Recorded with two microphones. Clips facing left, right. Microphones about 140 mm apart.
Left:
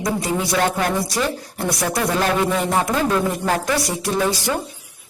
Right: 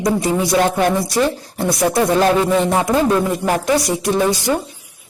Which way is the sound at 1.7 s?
25° right (ahead or behind).